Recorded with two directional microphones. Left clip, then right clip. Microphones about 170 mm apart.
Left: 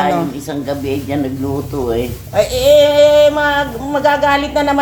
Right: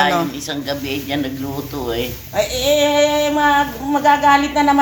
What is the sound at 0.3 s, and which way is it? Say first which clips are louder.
A man's voice: left 2 dB; 40° left (ahead or behind).